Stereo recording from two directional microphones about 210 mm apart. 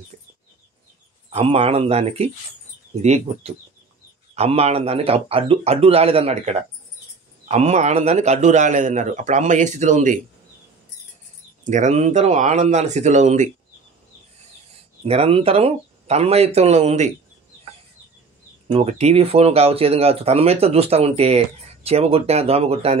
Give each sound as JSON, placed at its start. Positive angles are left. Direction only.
{"t": 0.1, "sound": "bird", "side_deg": -35}
{"t": 1.3, "sound": "a man's voice", "side_deg": -30}
{"t": 11.6, "sound": "a man's voice", "side_deg": -35}
{"t": 15.0, "sound": "speech", "side_deg": -30}
{"t": 18.7, "sound": "speech", "side_deg": -30}